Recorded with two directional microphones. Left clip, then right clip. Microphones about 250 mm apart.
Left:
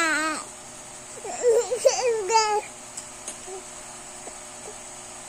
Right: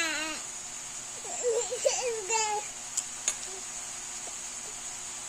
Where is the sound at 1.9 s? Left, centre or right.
Left.